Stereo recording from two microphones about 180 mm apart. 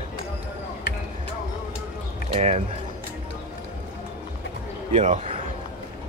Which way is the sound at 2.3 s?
35° right (ahead or behind).